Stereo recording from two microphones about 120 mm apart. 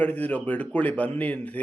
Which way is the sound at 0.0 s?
15° left (ahead or behind).